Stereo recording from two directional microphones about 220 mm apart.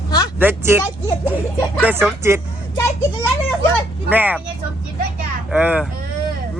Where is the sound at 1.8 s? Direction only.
10° right (ahead or behind).